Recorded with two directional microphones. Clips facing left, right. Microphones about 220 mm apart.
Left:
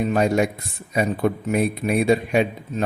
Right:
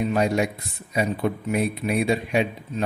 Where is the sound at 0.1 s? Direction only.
50° left (ahead or behind).